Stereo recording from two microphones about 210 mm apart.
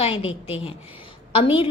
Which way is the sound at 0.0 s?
25° left (ahead or behind).